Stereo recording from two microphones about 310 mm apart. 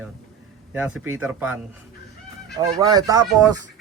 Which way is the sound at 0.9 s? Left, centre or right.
Right.